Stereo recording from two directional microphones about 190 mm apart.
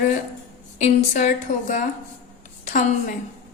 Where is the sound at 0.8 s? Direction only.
40° left (ahead or behind).